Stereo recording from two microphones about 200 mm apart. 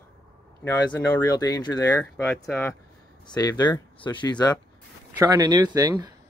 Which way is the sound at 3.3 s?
20° left (ahead or behind).